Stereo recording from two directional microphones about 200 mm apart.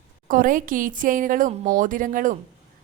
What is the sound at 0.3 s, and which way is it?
A woman's voice, 40° right (ahead or behind).